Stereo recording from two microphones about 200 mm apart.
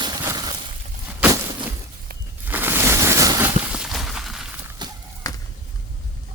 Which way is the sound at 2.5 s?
10° right (ahead or behind).